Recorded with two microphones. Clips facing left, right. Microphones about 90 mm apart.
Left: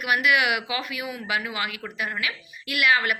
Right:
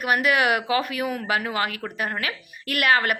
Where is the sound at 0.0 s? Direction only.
40° right (ahead or behind).